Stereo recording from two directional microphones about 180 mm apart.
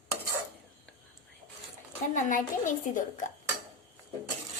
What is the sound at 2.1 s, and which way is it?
Speech, 45° left (ahead or behind).